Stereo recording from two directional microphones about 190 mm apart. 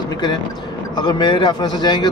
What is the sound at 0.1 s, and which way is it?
A man's voice, 20° left (ahead or behind).